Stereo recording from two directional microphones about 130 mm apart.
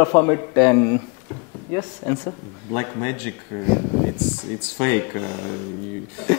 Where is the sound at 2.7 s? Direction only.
20° left (ahead or behind).